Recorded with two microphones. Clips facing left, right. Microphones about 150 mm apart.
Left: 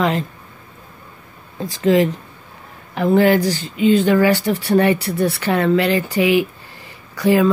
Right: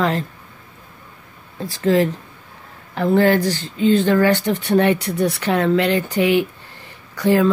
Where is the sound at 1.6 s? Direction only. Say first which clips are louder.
Left 2 dB; 15° left (ahead or behind).